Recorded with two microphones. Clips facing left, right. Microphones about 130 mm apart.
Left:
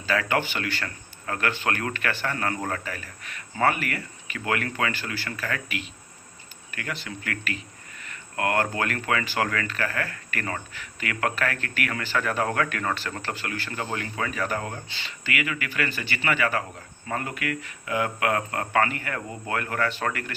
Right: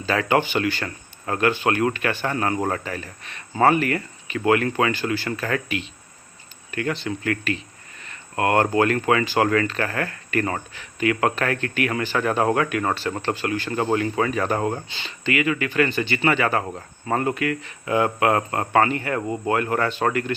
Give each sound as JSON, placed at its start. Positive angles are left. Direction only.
{"t": 0.0, "sound": "speech", "side_deg": -25}